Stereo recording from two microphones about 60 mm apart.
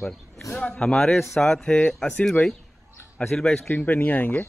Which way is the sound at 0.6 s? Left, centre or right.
Centre.